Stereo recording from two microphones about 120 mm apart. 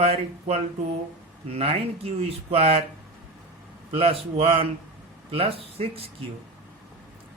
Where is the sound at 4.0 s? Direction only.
55° right (ahead or behind).